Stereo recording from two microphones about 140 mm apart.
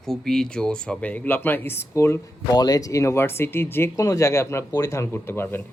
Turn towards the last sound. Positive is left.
turn(degrees=15)  # may be behind; listen again after turning